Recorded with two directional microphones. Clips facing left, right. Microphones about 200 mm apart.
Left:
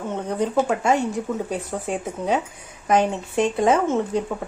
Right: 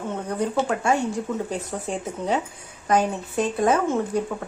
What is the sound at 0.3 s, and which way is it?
Speech, 20° left (ahead or behind).